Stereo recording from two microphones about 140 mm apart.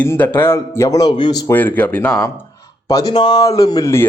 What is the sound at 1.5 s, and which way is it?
Speech, 15° left (ahead or behind).